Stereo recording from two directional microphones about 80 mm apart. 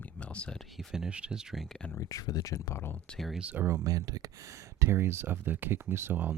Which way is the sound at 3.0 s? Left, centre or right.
Centre.